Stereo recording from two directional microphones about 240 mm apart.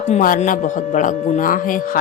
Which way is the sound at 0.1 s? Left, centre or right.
Left.